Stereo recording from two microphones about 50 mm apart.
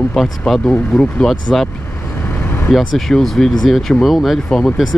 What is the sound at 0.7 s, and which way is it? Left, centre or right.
Speech, centre.